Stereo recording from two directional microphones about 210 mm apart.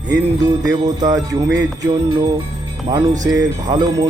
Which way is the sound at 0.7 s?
15° right (ahead or behind).